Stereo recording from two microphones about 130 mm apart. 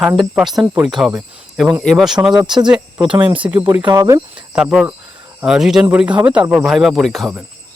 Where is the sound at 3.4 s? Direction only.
20° right (ahead or behind).